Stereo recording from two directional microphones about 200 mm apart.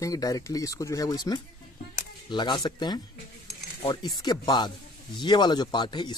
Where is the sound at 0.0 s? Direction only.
15° left (ahead or behind).